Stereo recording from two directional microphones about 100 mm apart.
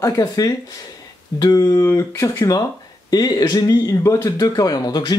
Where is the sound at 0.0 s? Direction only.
35° left (ahead or behind).